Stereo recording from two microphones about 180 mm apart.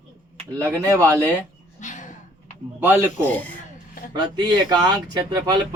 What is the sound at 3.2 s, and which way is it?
Speech, 10° left (ahead or behind).